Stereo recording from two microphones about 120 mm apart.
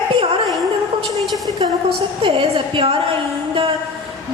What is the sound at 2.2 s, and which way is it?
Speech, 45° right (ahead or behind).